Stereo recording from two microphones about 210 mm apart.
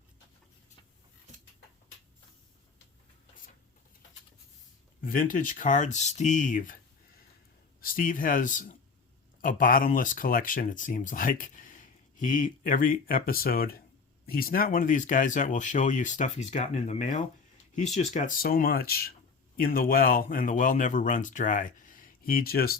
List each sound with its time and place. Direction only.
4.9 s speech: 40° left (ahead or behind)
7.8 s speech: 40° left (ahead or behind)